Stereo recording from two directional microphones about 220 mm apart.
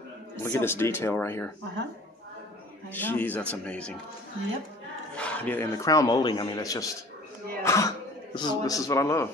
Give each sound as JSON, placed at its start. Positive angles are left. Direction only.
{"t": 0.4, "sound": "a man's voice", "side_deg": 10}
{"t": 2.9, "sound": "a man's voice", "side_deg": 10}
{"t": 5.1, "sound": "a man's voice", "side_deg": 5}